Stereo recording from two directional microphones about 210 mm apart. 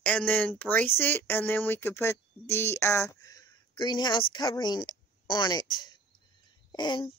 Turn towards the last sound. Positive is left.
turn(degrees=20)  # may be behind; listen again after turning